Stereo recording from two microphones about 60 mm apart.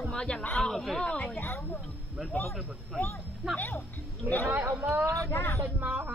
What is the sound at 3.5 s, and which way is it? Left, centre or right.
Music, left.